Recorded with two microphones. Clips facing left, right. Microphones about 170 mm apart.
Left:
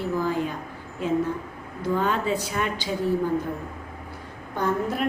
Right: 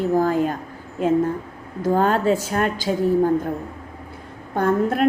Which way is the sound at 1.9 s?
45° right (ahead or behind).